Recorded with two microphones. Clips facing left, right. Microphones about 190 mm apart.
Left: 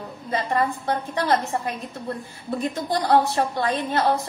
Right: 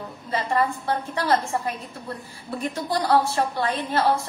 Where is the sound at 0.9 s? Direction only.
20° left (ahead or behind).